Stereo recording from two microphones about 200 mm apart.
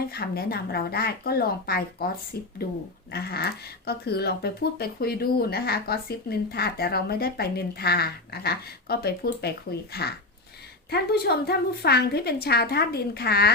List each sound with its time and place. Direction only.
0.1 s speech: 50° left (ahead or behind)